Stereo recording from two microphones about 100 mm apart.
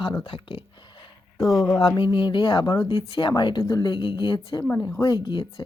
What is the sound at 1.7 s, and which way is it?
Speech, 50° left (ahead or behind).